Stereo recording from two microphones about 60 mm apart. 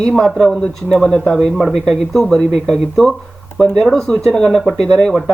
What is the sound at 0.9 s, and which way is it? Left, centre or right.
Speech, centre.